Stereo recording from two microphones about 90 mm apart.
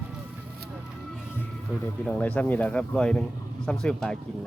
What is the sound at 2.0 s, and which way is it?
Speech, 15° left (ahead or behind).